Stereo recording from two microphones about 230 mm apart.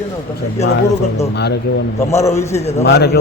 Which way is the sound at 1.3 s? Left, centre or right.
Left.